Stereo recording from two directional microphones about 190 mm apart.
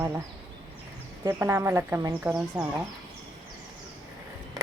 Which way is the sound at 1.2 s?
10° right (ahead or behind).